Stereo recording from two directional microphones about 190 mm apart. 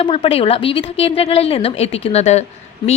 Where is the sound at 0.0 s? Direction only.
30° left (ahead or behind).